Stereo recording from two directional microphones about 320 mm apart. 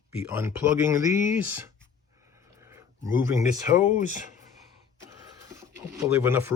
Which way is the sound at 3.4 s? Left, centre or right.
Left.